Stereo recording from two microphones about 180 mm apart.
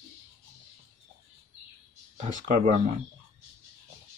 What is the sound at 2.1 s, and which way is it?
Speech, 40° right (ahead or behind).